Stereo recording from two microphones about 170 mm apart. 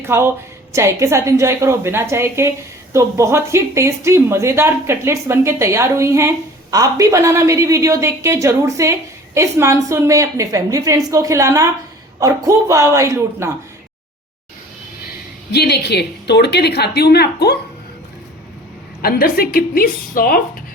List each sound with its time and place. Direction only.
0.0 s a woman's voice: 15° right (ahead or behind)
15.5 s a woman's voice: 75° left (ahead or behind)
19.0 s a woman's voice: 60° left (ahead or behind)